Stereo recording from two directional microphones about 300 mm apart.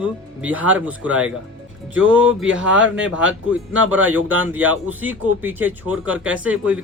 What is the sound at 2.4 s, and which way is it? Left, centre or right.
Speech, right.